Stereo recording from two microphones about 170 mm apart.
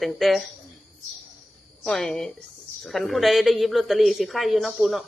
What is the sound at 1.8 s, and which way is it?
Speech, centre (ahead or behind).